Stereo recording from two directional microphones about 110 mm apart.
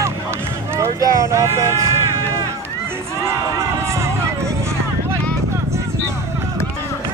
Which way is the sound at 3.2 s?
30° right (ahead or behind).